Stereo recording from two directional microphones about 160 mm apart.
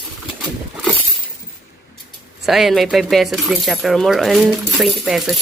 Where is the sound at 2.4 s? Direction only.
Centre (ahead or behind).